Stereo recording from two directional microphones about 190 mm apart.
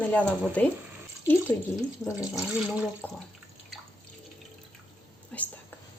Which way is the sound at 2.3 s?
5° right (ahead or behind).